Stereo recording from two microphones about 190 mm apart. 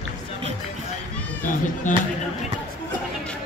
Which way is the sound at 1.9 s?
40° left (ahead or behind).